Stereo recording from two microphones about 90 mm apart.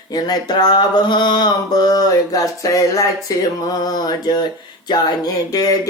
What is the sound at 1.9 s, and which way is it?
Speech, 40° left (ahead or behind).